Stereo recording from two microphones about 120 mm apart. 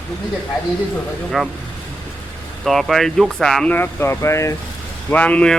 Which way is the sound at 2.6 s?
Centre (ahead or behind).